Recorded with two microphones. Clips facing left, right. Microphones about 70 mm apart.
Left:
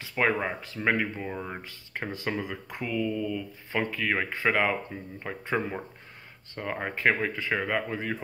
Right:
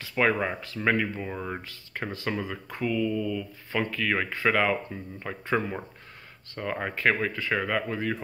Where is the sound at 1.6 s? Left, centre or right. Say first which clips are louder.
Right 1 dB; left.